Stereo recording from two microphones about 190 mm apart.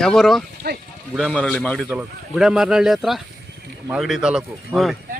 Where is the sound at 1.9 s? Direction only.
5° right (ahead or behind).